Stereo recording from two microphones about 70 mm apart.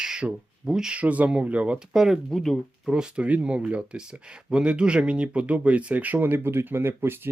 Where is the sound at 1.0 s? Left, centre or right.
Right.